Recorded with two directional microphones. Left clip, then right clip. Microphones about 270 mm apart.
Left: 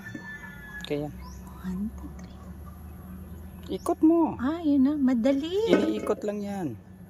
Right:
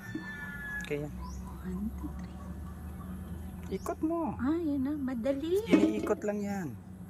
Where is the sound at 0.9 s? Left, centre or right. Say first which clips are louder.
Left 9 dB; centre.